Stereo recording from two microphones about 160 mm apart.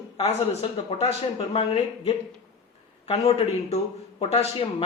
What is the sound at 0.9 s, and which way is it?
Speech, 40° left (ahead or behind).